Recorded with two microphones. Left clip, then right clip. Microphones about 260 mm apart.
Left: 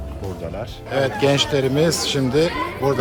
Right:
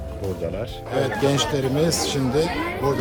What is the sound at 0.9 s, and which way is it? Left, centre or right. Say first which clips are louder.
Speech: left 3 dB; centre.